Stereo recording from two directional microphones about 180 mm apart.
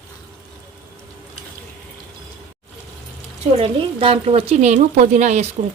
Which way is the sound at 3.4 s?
30° right (ahead or behind).